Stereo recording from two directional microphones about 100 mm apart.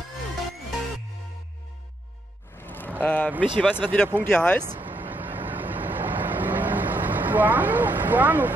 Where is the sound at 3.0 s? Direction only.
15° left (ahead or behind).